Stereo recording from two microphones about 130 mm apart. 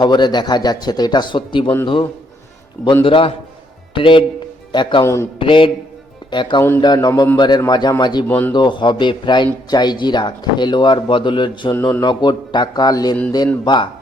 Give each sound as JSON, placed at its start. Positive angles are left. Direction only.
{"t": 0.0, "sound": "speech", "side_deg": 35}
{"t": 2.8, "sound": "speech", "side_deg": 40}
{"t": 5.0, "sound": "speech", "side_deg": 20}
{"t": 5.4, "sound": "speech", "side_deg": 40}
{"t": 6.6, "sound": "speech", "side_deg": 20}
{"t": 6.8, "sound": "speech", "side_deg": 30}
{"t": 8.3, "sound": "speech", "side_deg": 15}
{"t": 8.5, "sound": "speech", "side_deg": 35}
{"t": 11.7, "sound": "speech", "side_deg": 25}
{"t": 12.0, "sound": "speech", "side_deg": 35}